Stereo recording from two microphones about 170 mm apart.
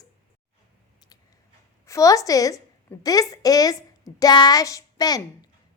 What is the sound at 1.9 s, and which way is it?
A woman's voice, 20° left (ahead or behind).